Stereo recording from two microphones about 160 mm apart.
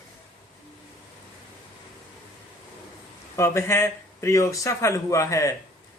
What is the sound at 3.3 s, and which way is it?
Speech, 15° left (ahead or behind).